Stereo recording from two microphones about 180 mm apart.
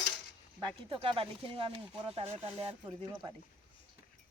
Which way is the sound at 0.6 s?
30° right (ahead or behind).